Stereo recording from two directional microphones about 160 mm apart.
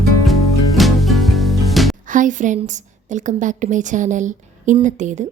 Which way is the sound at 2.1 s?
55° right (ahead or behind).